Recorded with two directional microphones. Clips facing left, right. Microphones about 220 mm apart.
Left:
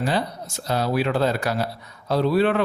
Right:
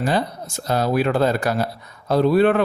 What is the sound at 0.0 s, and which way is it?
Speech, 50° right (ahead or behind).